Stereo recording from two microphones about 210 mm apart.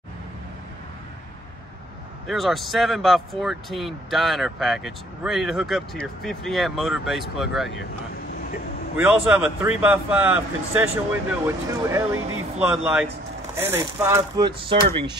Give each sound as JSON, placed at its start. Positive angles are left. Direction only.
{"t": 2.2, "sound": "speech", "side_deg": 0}
{"t": 8.9, "sound": "speech", "side_deg": -10}